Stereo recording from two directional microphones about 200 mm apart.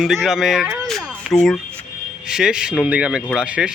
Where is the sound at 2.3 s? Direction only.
5° right (ahead or behind).